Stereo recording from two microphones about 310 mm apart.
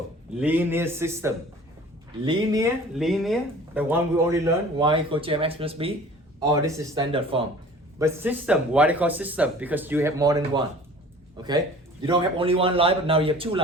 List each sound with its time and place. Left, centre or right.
0.3 s speech: centre
2.9 s speech: centre
7.9 s speech: centre